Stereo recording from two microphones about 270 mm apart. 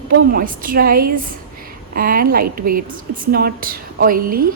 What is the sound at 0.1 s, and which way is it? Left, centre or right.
A woman's voice, right.